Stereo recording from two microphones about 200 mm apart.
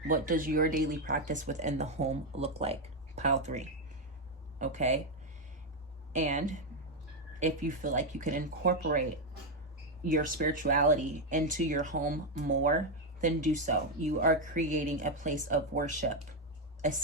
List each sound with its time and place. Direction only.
0.1 s speech: 45° right (ahead or behind)
6.1 s speech: 40° right (ahead or behind)
10.0 s speech: 45° right (ahead or behind)